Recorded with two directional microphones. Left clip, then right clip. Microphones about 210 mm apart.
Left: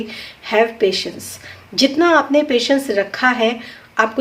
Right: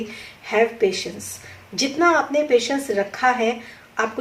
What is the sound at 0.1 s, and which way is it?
A woman's voice, 40° left (ahead or behind).